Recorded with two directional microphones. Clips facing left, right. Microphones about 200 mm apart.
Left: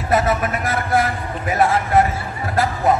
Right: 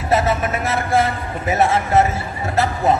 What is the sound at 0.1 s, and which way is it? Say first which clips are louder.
A man's voice: even; 25° right (ahead or behind).